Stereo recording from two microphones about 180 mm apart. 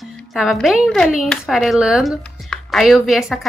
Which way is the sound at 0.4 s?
Centre (ahead or behind).